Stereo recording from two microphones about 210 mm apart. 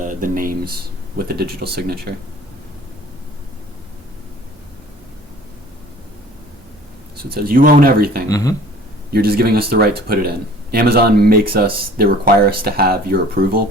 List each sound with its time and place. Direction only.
0.0 s speech: 40° right (ahead or behind)
7.2 s speech: 45° right (ahead or behind)
8.3 s speech: 15° left (ahead or behind)
9.1 s speech: 50° right (ahead or behind)